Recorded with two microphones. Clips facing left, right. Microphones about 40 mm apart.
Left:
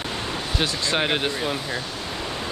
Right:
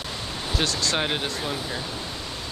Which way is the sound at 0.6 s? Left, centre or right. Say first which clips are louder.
Left 1 dB; left.